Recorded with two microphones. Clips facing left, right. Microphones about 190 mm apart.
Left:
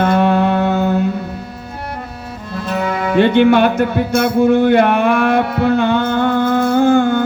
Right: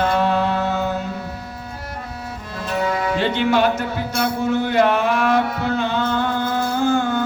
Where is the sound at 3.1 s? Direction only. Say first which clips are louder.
Left 10 dB; 60° left (ahead or behind).